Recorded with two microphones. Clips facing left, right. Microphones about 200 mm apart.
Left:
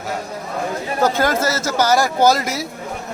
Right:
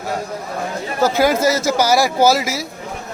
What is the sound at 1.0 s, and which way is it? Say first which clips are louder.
Speech: right 3 dB; 10° right (ahead or behind).